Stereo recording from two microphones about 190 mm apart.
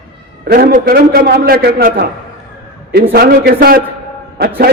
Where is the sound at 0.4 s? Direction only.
50° right (ahead or behind).